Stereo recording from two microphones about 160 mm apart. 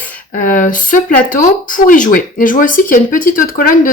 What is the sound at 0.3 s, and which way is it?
Speech, 55° left (ahead or behind).